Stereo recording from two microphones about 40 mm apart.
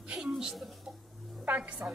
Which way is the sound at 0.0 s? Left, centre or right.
Right.